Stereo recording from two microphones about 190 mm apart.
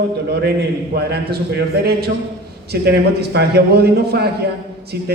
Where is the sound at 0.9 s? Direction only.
60° right (ahead or behind).